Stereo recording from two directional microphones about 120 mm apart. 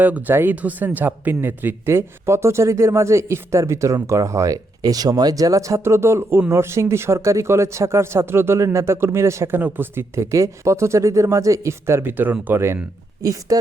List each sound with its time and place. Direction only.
0.0 s speech: 15° right (ahead or behind)